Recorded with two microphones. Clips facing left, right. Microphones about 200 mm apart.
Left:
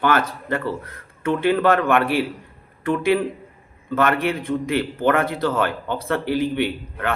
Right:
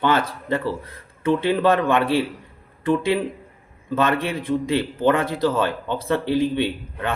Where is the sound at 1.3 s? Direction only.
15° right (ahead or behind).